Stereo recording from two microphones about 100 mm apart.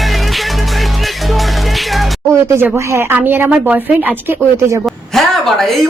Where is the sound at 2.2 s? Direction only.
25° right (ahead or behind).